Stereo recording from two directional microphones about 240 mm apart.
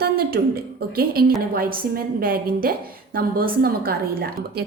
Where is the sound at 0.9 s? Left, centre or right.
Right.